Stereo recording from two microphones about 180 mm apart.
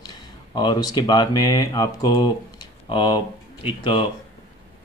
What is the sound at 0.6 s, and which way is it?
Speech, 25° left (ahead or behind).